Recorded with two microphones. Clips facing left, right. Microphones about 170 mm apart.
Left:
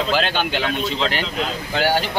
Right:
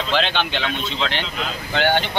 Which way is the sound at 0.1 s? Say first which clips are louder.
Left 1 dB; 10° left (ahead or behind).